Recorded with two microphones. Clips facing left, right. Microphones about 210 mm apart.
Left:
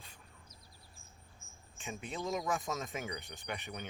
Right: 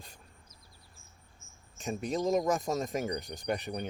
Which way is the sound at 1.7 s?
40° right (ahead or behind).